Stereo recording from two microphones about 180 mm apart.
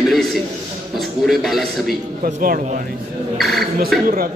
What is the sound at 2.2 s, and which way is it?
Speech, 50° right (ahead or behind).